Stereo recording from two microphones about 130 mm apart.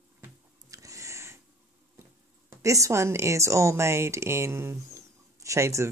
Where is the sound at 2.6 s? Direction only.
25° right (ahead or behind).